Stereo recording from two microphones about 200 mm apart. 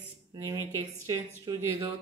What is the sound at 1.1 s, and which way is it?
Speech, 15° right (ahead or behind).